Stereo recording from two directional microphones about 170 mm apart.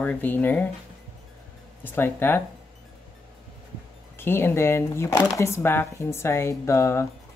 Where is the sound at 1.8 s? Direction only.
10° left (ahead or behind).